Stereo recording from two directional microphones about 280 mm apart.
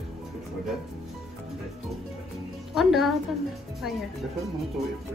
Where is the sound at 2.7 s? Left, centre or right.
Centre.